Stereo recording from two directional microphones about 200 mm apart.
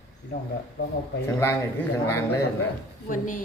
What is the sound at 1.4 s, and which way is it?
Speech, 10° left (ahead or behind).